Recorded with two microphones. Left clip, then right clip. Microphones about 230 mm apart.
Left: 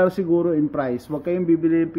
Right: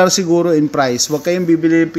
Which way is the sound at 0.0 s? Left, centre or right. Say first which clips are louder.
Right 6 dB; right.